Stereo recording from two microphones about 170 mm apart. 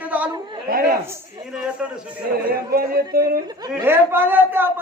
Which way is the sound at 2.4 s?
60° right (ahead or behind).